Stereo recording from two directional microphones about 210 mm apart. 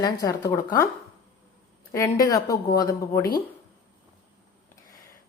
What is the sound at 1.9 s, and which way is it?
Speech, 15° left (ahead or behind).